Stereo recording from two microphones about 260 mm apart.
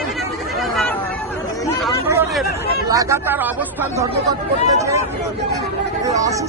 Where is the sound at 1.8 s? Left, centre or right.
Centre.